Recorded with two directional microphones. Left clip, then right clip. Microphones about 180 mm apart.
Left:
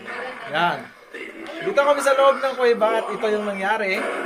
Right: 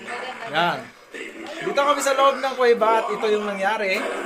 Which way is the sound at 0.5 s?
Centre (ahead or behind).